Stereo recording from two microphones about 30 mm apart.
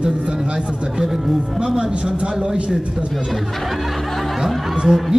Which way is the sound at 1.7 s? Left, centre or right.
Right.